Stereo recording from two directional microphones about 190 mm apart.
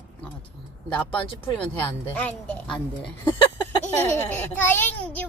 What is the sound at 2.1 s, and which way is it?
Speech, 10° left (ahead or behind).